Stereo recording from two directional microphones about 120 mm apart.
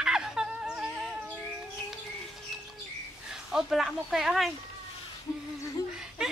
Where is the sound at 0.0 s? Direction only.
5° right (ahead or behind).